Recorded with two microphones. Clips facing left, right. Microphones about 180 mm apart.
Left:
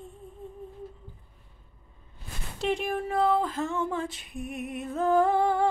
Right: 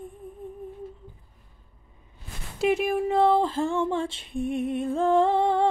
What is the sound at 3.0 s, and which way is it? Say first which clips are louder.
Female singing: right 4 dB; 25° right (ahead or behind).